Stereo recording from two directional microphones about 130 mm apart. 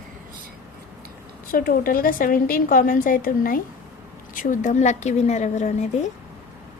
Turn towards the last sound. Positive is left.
turn(degrees=65)  # may be behind; listen again after turning